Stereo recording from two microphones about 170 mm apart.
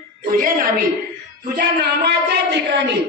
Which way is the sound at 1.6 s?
75° right (ahead or behind).